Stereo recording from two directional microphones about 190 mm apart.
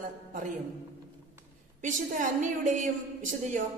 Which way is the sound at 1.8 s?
40° right (ahead or behind).